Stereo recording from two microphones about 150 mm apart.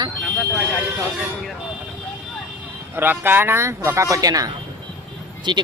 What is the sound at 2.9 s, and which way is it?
Speech, 15° right (ahead or behind).